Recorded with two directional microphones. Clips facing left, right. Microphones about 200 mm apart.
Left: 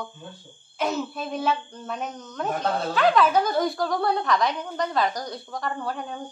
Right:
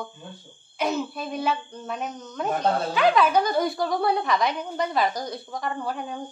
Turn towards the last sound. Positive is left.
turn(degrees=-5)  # may be behind; listen again after turning